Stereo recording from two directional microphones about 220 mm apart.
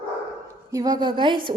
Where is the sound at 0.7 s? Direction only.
15° right (ahead or behind).